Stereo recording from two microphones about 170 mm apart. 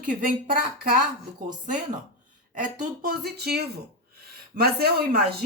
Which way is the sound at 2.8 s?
60° right (ahead or behind).